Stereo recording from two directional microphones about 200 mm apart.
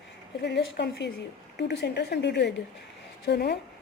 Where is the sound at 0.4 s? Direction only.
60° left (ahead or behind).